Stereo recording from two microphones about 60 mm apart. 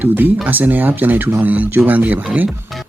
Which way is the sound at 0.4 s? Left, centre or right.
Right.